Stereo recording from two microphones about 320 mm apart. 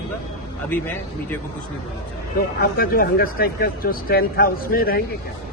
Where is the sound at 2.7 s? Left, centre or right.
Left.